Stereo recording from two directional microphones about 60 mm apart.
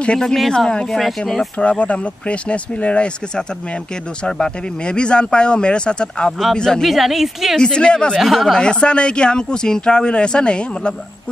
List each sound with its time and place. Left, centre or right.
0.0 s a woman's voice: centre
1.6 s speech: centre
6.9 s a woman's voice: centre
7.5 s speech: centre
8.2 s a woman's voice: centre
8.5 s speech: centre